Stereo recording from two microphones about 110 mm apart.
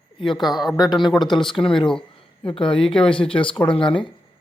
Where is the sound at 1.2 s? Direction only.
45° left (ahead or behind).